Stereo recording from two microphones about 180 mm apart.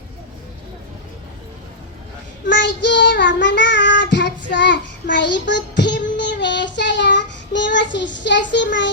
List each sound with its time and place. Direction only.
2.5 s child singing: 80° left